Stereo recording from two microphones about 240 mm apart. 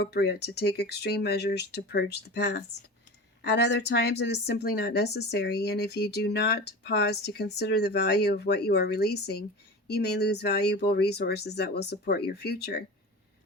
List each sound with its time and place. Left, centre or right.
0.0 s speech: left